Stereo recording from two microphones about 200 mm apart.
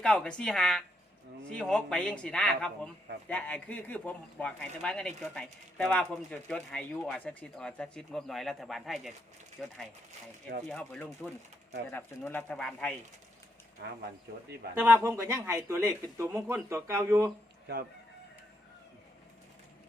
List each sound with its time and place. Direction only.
0.0 s speech: 5° left (ahead or behind)
14.8 s speech: 10° right (ahead or behind)
17.7 s speech: 55° right (ahead or behind)